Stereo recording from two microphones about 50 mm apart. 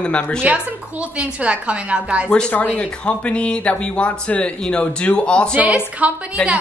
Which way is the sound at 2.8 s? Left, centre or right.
Left.